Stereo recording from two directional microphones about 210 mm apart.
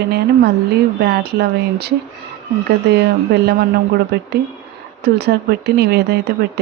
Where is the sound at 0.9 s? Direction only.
50° right (ahead or behind).